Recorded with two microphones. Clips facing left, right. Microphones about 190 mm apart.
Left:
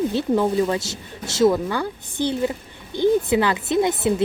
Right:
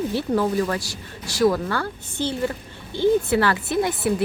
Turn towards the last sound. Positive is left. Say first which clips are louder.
# left 3 dB
turn(degrees=20)  # may be behind; listen again after turning